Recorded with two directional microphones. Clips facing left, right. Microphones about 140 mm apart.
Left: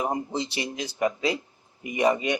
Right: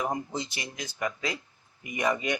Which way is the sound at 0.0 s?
30° left (ahead or behind).